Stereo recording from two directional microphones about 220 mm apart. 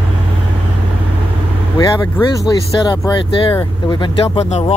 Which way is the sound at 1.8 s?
15° left (ahead or behind).